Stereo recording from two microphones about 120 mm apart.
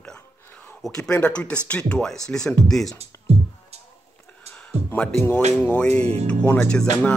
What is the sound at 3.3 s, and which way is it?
Music, 60° right (ahead or behind).